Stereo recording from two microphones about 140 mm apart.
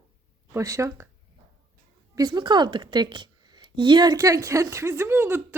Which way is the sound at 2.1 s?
25° right (ahead or behind).